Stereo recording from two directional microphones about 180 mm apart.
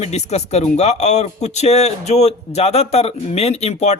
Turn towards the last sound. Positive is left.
turn(degrees=35)  # may be behind; listen again after turning